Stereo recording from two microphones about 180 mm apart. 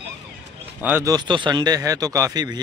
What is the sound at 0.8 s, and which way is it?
Speech, 15° right (ahead or behind).